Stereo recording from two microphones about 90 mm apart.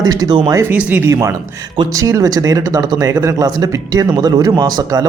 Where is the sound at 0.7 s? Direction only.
20° right (ahead or behind).